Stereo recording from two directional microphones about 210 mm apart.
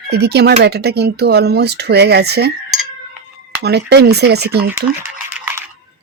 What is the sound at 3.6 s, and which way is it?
Speech, 50° right (ahead or behind).